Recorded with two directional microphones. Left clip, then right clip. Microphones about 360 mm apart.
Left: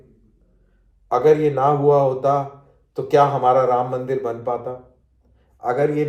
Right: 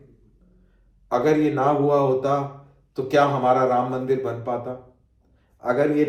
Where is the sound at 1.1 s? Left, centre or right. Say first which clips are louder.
Left 4 dB; centre.